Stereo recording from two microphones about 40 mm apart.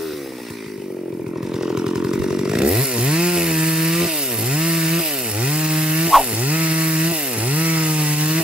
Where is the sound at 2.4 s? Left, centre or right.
Centre.